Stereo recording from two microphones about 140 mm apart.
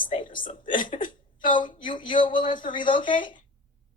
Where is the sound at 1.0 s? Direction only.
75° left (ahead or behind).